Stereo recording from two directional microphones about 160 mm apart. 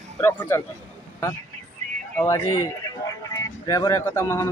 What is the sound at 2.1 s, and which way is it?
Speech, 15° left (ahead or behind).